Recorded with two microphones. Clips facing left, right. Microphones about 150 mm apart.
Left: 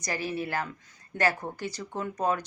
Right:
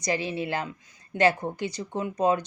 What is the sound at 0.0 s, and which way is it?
Speech, 20° right (ahead or behind).